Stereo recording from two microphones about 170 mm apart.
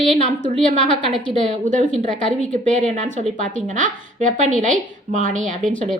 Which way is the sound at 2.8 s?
45° right (ahead or behind).